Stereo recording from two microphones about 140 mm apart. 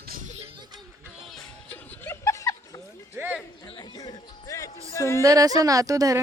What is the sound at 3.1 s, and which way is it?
Music, 15° right (ahead or behind).